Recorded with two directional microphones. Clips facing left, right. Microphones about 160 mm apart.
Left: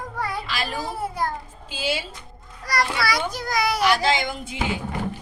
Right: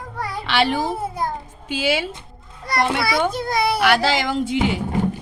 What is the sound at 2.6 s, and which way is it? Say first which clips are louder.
A child's voice: right 3 dB; 25° right (ahead or behind).